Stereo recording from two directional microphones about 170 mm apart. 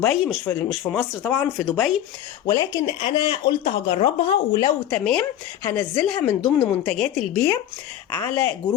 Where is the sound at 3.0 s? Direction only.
30° left (ahead or behind).